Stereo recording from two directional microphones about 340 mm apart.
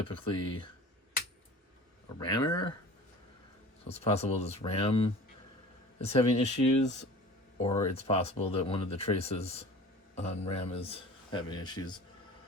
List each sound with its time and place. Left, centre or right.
0.0 s speech: centre
2.1 s speech: centre
3.8 s speech: centre